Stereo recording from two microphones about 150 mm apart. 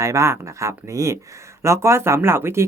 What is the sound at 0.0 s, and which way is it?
Speech, 20° right (ahead or behind).